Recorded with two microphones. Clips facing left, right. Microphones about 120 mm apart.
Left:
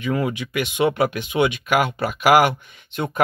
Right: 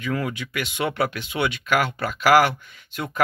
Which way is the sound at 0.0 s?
20° left (ahead or behind).